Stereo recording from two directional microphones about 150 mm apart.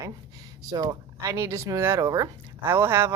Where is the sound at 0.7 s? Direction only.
25° right (ahead or behind).